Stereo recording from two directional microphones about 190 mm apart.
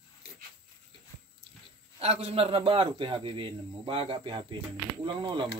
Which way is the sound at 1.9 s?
35° right (ahead or behind).